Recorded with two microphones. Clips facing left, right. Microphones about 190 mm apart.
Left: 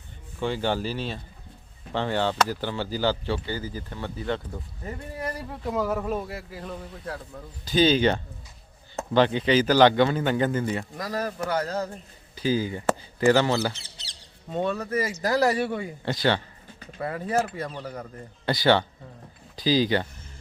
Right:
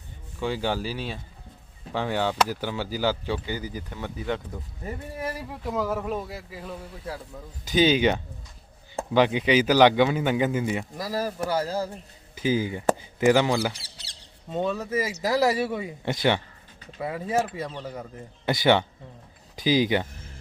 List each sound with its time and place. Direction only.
0.4 s speech: 5° right (ahead or behind)
7.7 s speech: 15° right (ahead or behind)
14.5 s speech: centre (ahead or behind)
16.0 s speech: 20° right (ahead or behind)
17.0 s speech: 5° right (ahead or behind)
18.4 s speech: 20° right (ahead or behind)